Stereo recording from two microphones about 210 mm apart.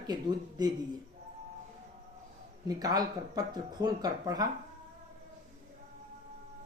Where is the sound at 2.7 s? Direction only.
20° right (ahead or behind).